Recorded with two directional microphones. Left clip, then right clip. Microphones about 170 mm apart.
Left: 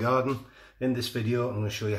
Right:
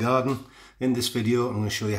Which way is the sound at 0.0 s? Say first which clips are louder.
Right 2 dB; 60° right (ahead or behind).